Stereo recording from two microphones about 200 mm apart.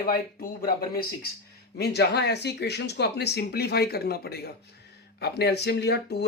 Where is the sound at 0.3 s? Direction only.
50° left (ahead or behind).